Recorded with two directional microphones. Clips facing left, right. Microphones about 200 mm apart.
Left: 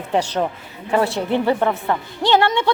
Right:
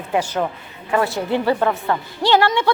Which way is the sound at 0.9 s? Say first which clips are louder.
Left 1 dB; 25° left (ahead or behind).